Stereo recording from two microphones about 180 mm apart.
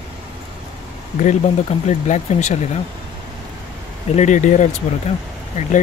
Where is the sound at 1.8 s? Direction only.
40° left (ahead or behind).